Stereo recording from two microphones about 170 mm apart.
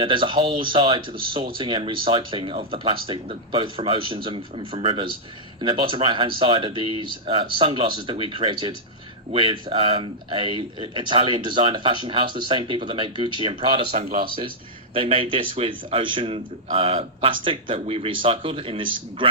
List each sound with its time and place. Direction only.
0.0 s speech: 30° right (ahead or behind)